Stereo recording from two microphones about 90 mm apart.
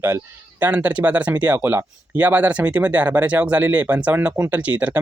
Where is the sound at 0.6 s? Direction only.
20° right (ahead or behind).